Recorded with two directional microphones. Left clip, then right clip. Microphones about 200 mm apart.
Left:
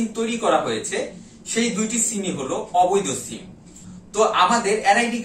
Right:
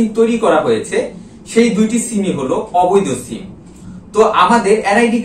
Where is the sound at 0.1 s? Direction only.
Centre (ahead or behind).